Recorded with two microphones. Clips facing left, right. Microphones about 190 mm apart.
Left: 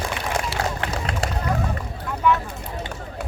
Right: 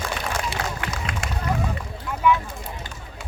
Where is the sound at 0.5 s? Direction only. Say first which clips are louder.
Left 4 dB; 15° right (ahead or behind).